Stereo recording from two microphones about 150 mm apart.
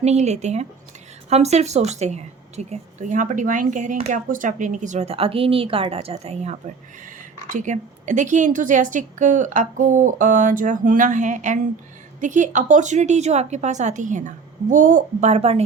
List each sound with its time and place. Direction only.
0.0 s a woman's voice: 50° right (ahead or behind)